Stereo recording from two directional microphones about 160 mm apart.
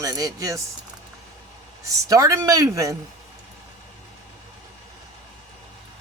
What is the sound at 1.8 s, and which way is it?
A man's voice, 20° right (ahead or behind).